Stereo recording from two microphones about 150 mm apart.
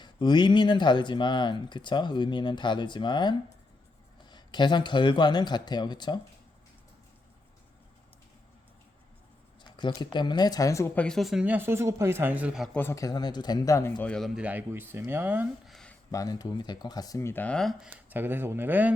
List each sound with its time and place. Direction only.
0.0 s speech: 30° left (ahead or behind)
9.6 s speech: 30° left (ahead or behind); by 12.7 s 5° right (ahead or behind)
12.7 s speech: 15° left (ahead or behind)
14.1 s speech: centre (ahead or behind)
15.6 s a sound: 5° left (ahead or behind)
16.1 s speech: 25° left (ahead or behind); by 17.8 s centre (ahead or behind)
17.8 s speech: 10° right (ahead or behind)